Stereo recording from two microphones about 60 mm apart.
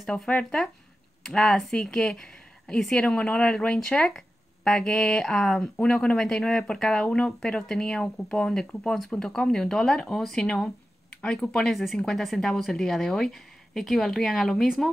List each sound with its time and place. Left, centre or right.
0.3 s speech: left
1.2 s speech: centre